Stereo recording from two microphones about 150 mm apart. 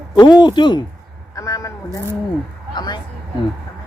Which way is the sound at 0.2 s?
30° left (ahead or behind).